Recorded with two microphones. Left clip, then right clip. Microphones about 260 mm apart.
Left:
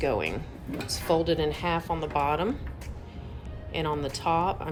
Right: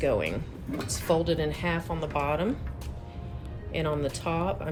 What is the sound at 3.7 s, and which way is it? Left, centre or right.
Speech, centre.